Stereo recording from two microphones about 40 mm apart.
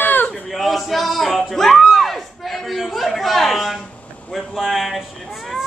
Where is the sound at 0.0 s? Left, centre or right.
Left.